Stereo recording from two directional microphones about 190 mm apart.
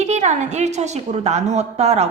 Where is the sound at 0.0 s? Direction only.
40° right (ahead or behind).